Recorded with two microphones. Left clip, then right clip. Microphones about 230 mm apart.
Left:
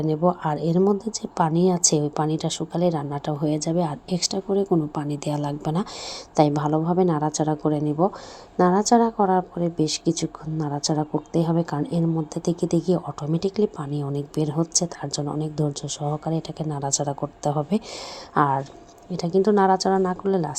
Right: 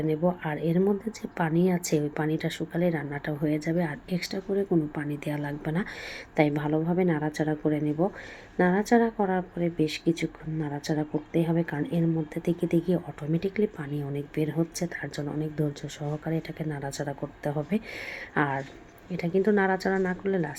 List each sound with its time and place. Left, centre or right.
0.0 s a woman's voice: left
9.0 s a woman's voice: centre
9.3 s a woman's voice: centre